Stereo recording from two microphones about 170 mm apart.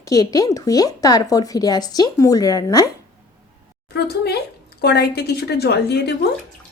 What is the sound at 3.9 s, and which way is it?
A woman's voice, 70° left (ahead or behind).